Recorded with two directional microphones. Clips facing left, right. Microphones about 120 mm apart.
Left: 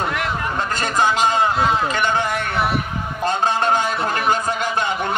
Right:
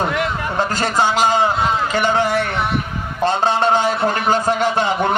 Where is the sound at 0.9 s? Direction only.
30° right (ahead or behind).